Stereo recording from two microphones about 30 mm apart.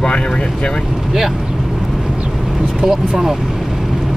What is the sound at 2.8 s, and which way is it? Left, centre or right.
Speech, centre.